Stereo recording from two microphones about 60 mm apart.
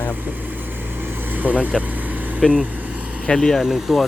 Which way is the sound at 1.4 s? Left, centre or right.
Right.